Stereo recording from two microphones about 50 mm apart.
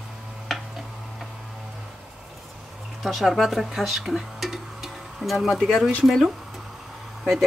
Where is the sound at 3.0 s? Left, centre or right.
Centre.